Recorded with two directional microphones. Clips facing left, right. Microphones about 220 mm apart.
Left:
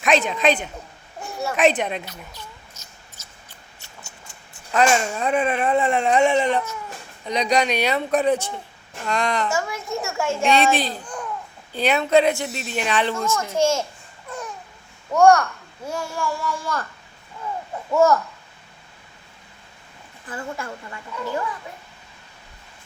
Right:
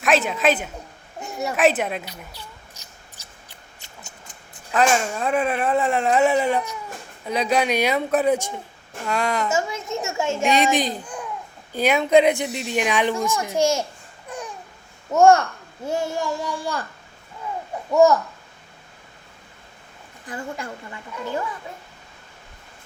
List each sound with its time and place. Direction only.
0.0 s speech: 5° right (ahead or behind)
1.2 s a sound: 20° right (ahead or behind)
1.5 s speech: 5° right (ahead or behind)
3.2 s a sound: 15° right (ahead or behind)
4.7 s speech: centre (ahead or behind)
9.5 s a child's voice: 20° right (ahead or behind)
14.3 s babbling: 15° right (ahead or behind)
15.1 s a child's voice: 25° right (ahead or behind)
20.2 s speech: 15° right (ahead or behind)